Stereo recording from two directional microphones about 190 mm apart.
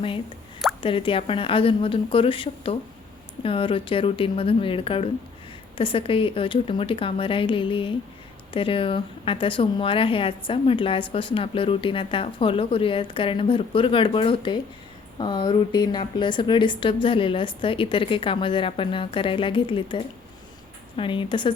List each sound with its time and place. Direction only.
0.8 s a woman's voice: 25° left (ahead or behind)